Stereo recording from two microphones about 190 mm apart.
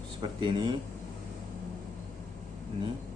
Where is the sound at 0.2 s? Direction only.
25° right (ahead or behind).